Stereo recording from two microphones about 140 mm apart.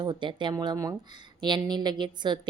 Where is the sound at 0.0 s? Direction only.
35° right (ahead or behind).